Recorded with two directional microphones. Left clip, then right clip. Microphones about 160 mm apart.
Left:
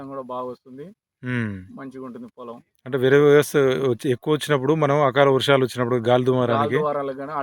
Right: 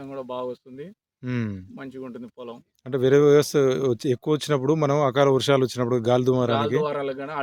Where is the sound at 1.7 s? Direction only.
30° right (ahead or behind).